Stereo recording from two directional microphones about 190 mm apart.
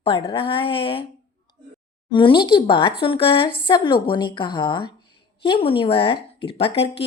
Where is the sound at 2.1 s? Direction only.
25° left (ahead or behind).